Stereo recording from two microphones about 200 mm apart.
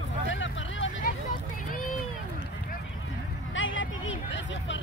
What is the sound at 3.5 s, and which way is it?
Vehicle, 75° left (ahead or behind).